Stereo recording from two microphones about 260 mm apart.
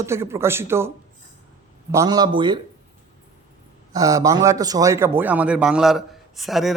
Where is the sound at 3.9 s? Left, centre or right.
Centre.